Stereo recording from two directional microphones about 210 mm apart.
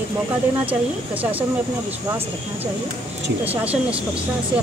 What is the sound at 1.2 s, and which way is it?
Speech, 5° right (ahead or behind).